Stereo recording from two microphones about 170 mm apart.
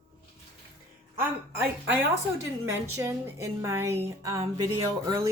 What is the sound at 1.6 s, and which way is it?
A woman's voice, 10° right (ahead or behind).